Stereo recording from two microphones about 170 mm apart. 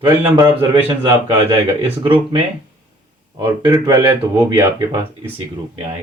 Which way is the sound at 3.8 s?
25° right (ahead or behind).